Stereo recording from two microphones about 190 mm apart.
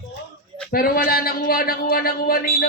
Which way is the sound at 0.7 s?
50° left (ahead or behind).